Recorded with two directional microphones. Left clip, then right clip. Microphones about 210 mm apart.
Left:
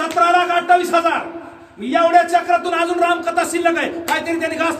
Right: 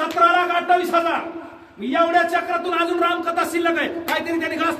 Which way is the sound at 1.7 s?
15° left (ahead or behind).